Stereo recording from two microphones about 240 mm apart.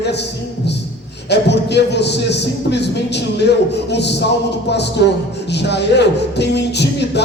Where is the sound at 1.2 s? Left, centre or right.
Left.